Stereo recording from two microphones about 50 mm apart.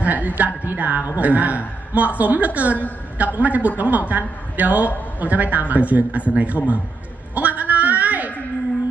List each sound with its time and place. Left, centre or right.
0.0 s music: right
0.7 s a woman's voice: right
7.3 s a sound: right